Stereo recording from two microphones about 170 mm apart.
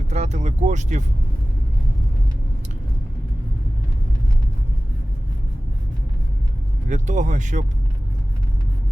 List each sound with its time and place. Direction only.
0.1 s speech: 40° right (ahead or behind)
6.8 s speech: 45° right (ahead or behind)